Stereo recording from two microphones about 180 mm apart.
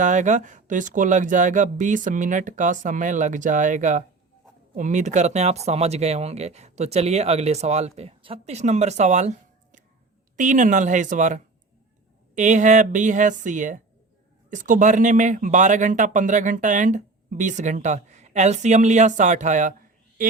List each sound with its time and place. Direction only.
0.0 s a man's voice: 45° right (ahead or behind)
10.3 s a man's voice: 45° right (ahead or behind)